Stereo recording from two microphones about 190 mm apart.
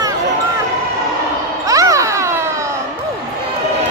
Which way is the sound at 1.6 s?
15° right (ahead or behind).